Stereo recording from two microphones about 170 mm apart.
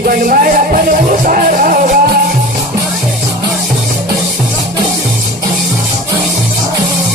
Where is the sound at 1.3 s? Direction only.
50° right (ahead or behind).